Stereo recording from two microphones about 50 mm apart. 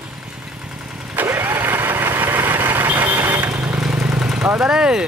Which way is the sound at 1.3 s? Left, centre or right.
Right.